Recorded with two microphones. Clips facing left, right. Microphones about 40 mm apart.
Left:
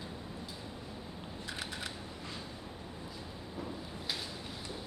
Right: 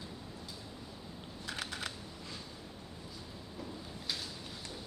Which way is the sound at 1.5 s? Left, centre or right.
Left.